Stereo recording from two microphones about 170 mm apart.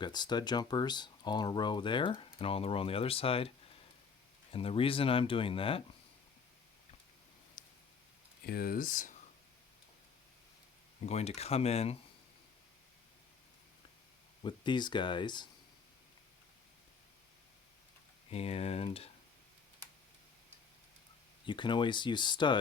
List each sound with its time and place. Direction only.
0.0 s speech: 25° left (ahead or behind)
4.5 s speech: 35° left (ahead or behind)
7.6 s a sound: 50° left (ahead or behind)
8.4 s speech: 60° left (ahead or behind)
11.0 s speech: 40° left (ahead or behind)
14.4 s speech: 25° left (ahead or behind)
18.3 s speech: 35° left (ahead or behind)
21.4 s speech: 30° left (ahead or behind)